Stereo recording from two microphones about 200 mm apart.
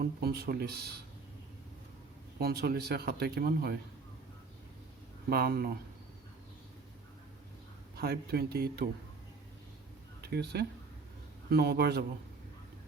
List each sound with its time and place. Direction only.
0.0 s speech: 50° right (ahead or behind)
2.4 s speech: 50° right (ahead or behind)
5.3 s speech: 50° right (ahead or behind)
7.9 s speech: 50° right (ahead or behind)
10.2 s speech: 55° right (ahead or behind)